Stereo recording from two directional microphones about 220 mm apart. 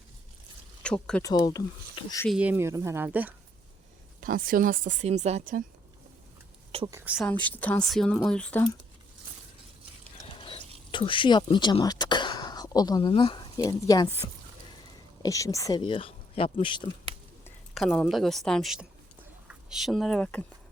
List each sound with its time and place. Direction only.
0.8 s speech: 5° left (ahead or behind)
1.3 s speech: 20° left (ahead or behind)
2.2 s speech: 5° right (ahead or behind)
4.2 s speech: 40° right (ahead or behind)
6.7 s a sound: 25° right (ahead or behind)
6.9 s speech: 5° right (ahead or behind)
7.4 s a woman's voice: 5° left (ahead or behind)
10.9 s speech: 20° left (ahead or behind)
15.2 s speech: 15° left (ahead or behind)
17.7 s speech: centre (ahead or behind)